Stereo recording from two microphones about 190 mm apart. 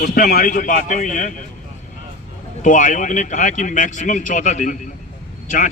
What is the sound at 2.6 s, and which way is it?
A man's voice, 40° left (ahead or behind).